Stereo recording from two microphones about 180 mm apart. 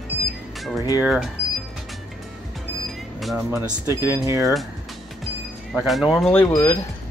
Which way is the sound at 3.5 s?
15° right (ahead or behind).